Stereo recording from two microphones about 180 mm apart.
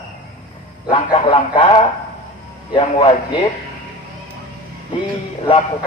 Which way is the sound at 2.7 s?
25° left (ahead or behind).